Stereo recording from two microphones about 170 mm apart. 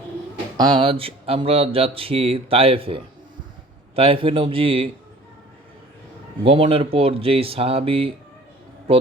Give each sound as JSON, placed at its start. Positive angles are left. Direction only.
{"t": 0.5, "sound": "speech", "side_deg": -25}
{"t": 6.4, "sound": "speech", "side_deg": -35}